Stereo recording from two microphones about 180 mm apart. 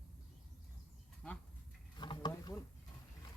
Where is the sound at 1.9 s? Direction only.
25° left (ahead or behind).